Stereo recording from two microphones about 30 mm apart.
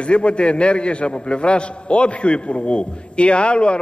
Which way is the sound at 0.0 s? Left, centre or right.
Left.